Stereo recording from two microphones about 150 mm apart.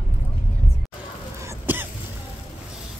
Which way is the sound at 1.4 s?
15° right (ahead or behind).